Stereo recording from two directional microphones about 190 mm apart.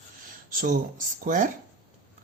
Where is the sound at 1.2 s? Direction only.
45° right (ahead or behind).